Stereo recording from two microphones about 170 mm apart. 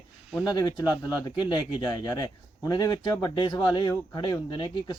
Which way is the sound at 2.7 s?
25° left (ahead or behind).